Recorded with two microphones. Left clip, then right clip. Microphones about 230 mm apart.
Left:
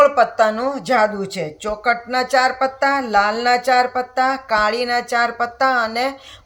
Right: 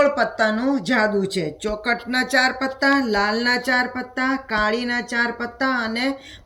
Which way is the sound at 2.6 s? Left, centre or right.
Left.